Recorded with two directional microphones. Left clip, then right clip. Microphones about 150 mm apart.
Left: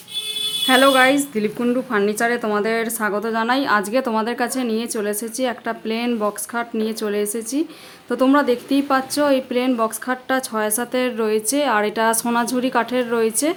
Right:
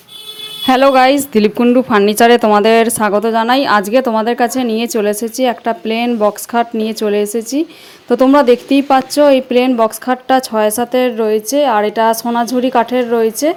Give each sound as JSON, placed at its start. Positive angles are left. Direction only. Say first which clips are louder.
{"t": 0.7, "sound": "speech", "louder": "right 6 dB", "side_deg": -55}
{"t": 1.6, "sound": "a woman's voice", "louder": "right 8 dB", "side_deg": -40}